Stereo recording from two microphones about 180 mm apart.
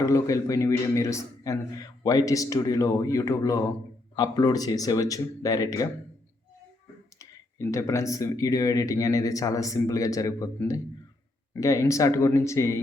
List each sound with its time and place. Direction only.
0.0 s a man's voice: 20° left (ahead or behind)
7.2 s a man's voice: 15° left (ahead or behind)